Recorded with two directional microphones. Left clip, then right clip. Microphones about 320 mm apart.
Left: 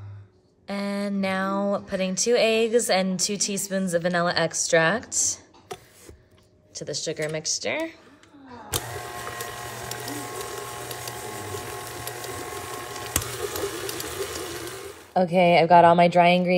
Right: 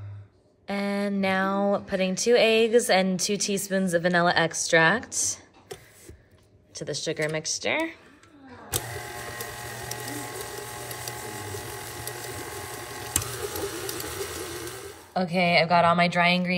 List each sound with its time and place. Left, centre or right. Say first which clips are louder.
0.7 s speech: right 1 dB; centre
6.7 s speech: even; centre
8.7 s printer: left 2 dB; centre